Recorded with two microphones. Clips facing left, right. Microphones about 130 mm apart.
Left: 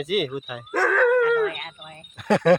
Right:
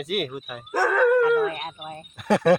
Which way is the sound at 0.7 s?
10° right (ahead or behind).